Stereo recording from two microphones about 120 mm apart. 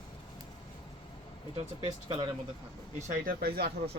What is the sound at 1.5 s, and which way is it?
Speech, 50° right (ahead or behind).